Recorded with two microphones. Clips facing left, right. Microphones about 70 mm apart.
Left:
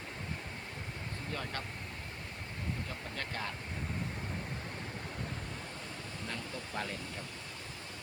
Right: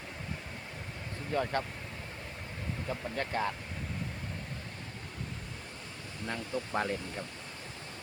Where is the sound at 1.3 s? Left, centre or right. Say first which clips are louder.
Right 10 dB; right.